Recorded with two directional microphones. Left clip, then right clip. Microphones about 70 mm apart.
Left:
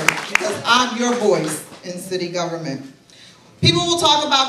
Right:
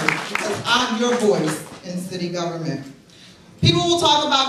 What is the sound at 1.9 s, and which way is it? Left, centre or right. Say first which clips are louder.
A woman's voice: left 4 dB; left.